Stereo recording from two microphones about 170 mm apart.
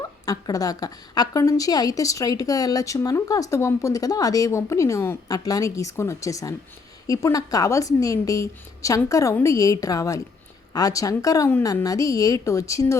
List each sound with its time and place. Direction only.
0.3 s a woman's voice: 20° left (ahead or behind)